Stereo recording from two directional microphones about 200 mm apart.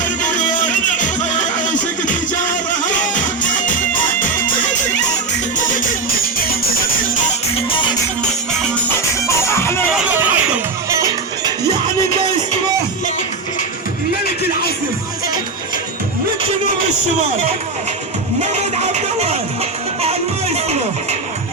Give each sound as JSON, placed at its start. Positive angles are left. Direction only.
{"t": 0.0, "sound": "music", "side_deg": 40}
{"t": 7.5, "sound": "music", "side_deg": 25}
{"t": 9.2, "sound": "music", "side_deg": 15}
{"t": 9.9, "sound": "music", "side_deg": -10}
{"t": 18.3, "sound": "music", "side_deg": -35}